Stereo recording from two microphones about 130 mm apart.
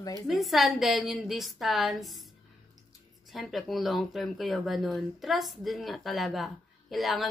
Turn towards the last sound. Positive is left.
turn(degrees=0)  # may be behind; listen again after turning